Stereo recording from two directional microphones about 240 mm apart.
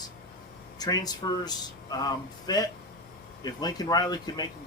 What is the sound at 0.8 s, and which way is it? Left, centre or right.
Speech, centre.